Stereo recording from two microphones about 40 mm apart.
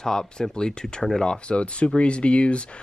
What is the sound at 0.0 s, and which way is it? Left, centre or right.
Speech, centre.